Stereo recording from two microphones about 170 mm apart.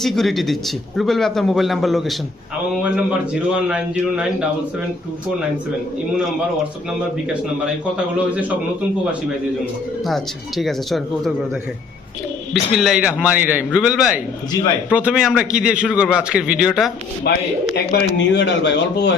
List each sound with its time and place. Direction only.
0.0 s a man's voice: centre (ahead or behind)
7.6 s a man's voice: 5° right (ahead or behind)
10.6 s a man's voice: centre (ahead or behind)
12.7 s a man's voice: centre (ahead or behind)
17.3 s speech: 75° left (ahead or behind)
17.9 s speech: 90° left